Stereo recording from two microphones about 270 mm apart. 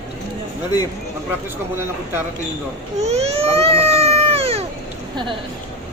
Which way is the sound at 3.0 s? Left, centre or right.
Right.